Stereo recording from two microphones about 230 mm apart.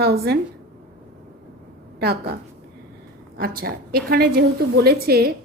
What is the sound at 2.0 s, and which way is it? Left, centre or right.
Speech, right.